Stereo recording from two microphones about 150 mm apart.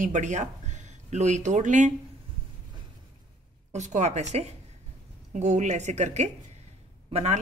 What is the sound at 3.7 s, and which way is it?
A woman's voice, 50° right (ahead or behind).